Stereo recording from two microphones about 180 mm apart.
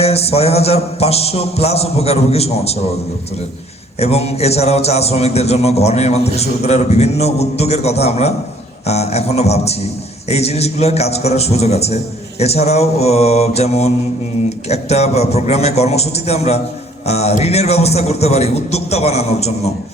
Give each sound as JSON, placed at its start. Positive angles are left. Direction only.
{"t": 0.0, "sound": "a man's voice", "side_deg": 35}
{"t": 4.0, "sound": "a man's voice", "side_deg": 35}